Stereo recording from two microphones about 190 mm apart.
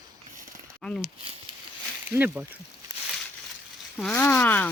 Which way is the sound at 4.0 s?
10° left (ahead or behind).